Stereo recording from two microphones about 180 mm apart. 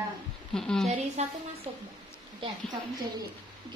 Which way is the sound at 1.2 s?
40° right (ahead or behind).